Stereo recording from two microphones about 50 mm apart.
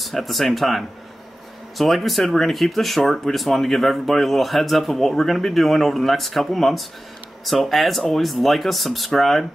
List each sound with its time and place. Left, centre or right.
0.0 s speech: centre